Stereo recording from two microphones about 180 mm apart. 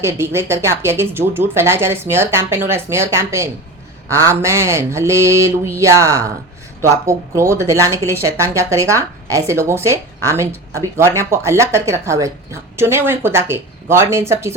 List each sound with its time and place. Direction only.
0.0 s speech: 15° right (ahead or behind)